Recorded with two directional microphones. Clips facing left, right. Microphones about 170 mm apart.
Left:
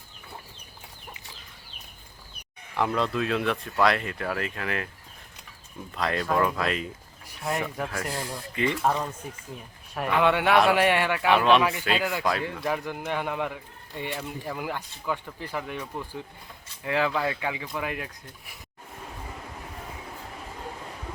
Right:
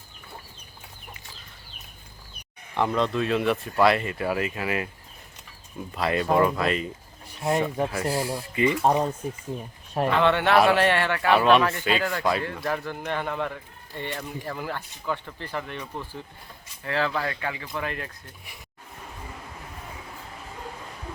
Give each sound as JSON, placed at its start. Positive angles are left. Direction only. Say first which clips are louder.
{"t": 2.7, "sound": "speech", "louder": "right 2 dB", "side_deg": 0}
{"t": 5.9, "sound": "speech", "louder": "right 3 dB", "side_deg": -5}
{"t": 7.5, "sound": "speech", "louder": "right 6 dB", "side_deg": -30}
{"t": 8.1, "sound": "speech", "louder": "right 6 dB", "side_deg": -5}
{"t": 8.8, "sound": "speech", "louder": "right 4 dB", "side_deg": -20}
{"t": 10.1, "sound": "speech", "louder": "even", "side_deg": 10}
{"t": 11.3, "sound": "speech", "louder": "right 2 dB", "side_deg": 0}
{"t": 12.6, "sound": "speech", "louder": "even", "side_deg": 10}